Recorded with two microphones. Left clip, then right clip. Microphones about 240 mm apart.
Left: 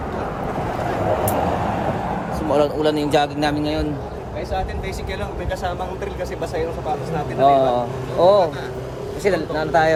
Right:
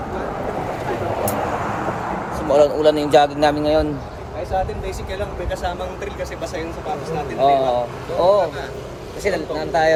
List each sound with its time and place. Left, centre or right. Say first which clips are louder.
2.5 s a man's voice: right 4 dB; centre
7.4 s speech: left 1 dB; centre